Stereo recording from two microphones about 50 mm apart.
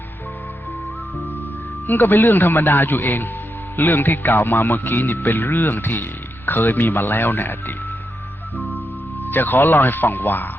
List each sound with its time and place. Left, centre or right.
1.9 s a man's voice: left
9.2 s speech: left